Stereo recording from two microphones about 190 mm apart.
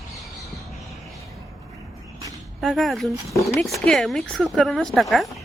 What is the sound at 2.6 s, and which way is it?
Speech, centre (ahead or behind).